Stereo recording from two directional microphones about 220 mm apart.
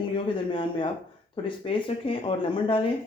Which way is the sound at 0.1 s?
20° left (ahead or behind).